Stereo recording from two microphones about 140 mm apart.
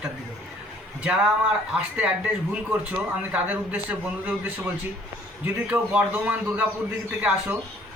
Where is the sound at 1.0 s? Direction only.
10° right (ahead or behind).